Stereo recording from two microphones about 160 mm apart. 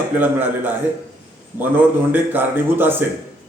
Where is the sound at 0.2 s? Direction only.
10° right (ahead or behind).